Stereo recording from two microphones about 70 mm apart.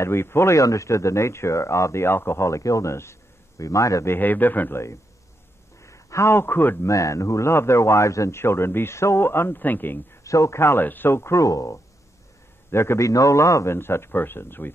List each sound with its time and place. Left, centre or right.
0.0 s speech: left
4.1 s a man's voice: left
5.9 s a man's voice: left
6.9 s a man's voice: left
10.2 s a man's voice: left
12.7 s speech: left
13.7 s a man's voice: left